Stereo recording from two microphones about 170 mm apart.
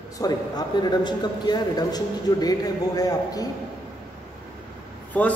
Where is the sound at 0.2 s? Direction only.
25° left (ahead or behind).